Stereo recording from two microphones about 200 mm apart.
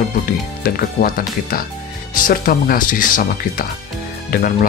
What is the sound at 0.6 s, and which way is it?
Speech, 45° left (ahead or behind).